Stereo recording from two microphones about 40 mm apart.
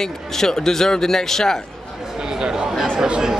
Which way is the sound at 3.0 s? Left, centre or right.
Centre.